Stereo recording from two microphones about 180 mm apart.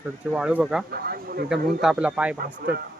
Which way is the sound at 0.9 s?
60° right (ahead or behind).